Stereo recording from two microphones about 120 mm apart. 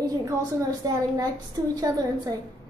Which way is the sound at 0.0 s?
30° right (ahead or behind).